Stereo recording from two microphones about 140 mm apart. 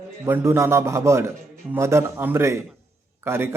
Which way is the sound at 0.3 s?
20° right (ahead or behind).